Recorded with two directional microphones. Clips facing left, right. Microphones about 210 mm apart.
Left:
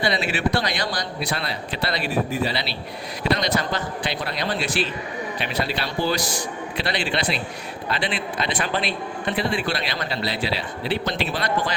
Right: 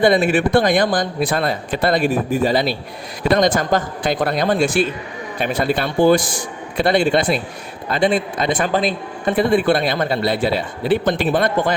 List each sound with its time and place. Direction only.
0.0 s speech: 50° right (ahead or behind)